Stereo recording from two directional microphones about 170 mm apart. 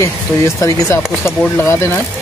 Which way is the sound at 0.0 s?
20° left (ahead or behind).